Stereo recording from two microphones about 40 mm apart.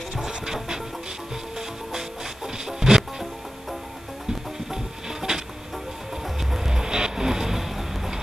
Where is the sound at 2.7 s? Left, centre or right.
Centre.